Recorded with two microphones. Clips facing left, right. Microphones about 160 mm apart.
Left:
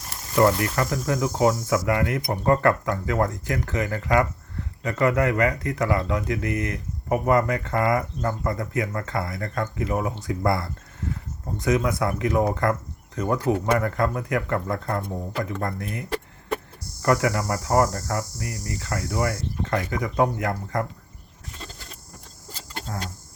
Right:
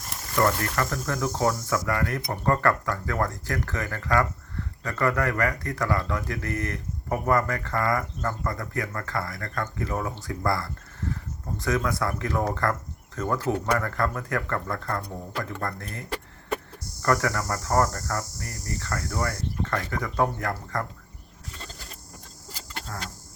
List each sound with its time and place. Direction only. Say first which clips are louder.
0.3 s speech: left 4 dB; 20° left (ahead or behind)